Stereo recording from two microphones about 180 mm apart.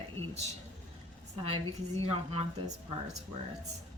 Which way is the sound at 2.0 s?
30° right (ahead or behind).